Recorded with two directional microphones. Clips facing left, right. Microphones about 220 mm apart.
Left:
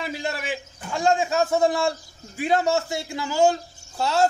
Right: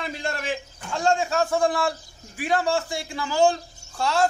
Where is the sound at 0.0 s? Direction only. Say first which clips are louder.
Left 1 dB; 5° left (ahead or behind).